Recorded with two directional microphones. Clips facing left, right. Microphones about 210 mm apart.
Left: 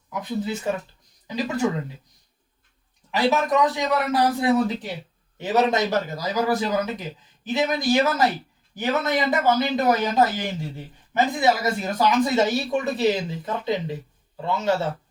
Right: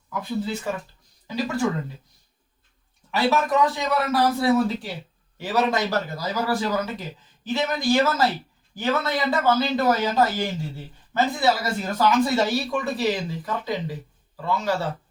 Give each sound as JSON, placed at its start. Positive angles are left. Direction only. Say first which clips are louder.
{"t": 0.1, "sound": "speech", "louder": "even", "side_deg": 20}
{"t": 3.1, "sound": "a man's voice", "louder": "left 1 dB", "side_deg": 15}